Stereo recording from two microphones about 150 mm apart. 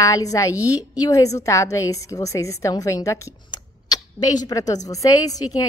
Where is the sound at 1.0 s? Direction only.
25° left (ahead or behind).